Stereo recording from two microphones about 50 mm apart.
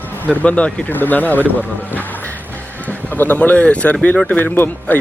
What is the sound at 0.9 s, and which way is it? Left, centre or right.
Speech, left.